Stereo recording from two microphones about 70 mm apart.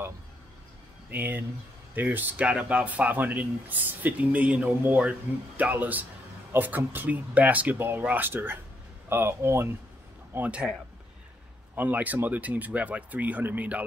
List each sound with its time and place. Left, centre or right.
1.1 s speech: right
11.7 s speech: right